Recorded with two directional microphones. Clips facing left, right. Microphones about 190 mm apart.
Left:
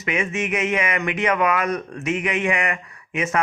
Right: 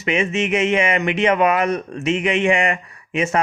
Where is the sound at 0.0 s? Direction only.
25° right (ahead or behind).